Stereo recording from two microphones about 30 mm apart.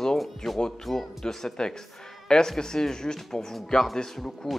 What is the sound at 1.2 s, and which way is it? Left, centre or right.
Speech, left.